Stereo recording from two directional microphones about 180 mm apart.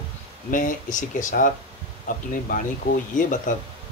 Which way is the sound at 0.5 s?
45° left (ahead or behind).